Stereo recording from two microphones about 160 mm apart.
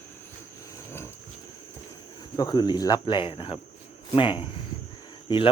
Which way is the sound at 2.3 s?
25° left (ahead or behind).